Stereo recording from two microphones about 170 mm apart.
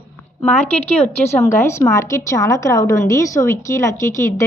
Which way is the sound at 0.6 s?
40° left (ahead or behind).